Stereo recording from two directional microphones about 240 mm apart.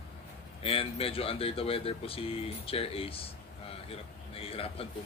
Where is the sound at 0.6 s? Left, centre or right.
Left.